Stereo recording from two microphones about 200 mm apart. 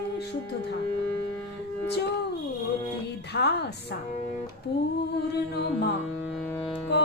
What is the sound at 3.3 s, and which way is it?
A capella, 55° left (ahead or behind).